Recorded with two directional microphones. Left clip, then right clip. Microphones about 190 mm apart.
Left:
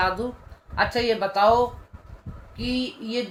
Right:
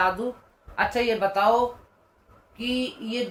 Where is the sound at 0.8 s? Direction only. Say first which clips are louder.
Left 1 dB; 20° left (ahead or behind).